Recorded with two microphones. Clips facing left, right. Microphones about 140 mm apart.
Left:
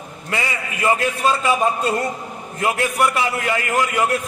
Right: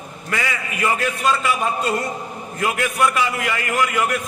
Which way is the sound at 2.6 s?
30° left (ahead or behind).